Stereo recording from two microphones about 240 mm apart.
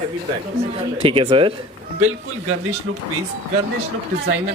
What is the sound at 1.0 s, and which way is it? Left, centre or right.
Speech, right.